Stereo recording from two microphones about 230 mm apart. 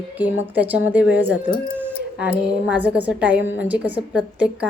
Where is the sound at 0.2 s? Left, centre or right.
Centre.